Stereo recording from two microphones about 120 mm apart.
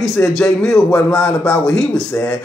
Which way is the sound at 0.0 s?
5° left (ahead or behind).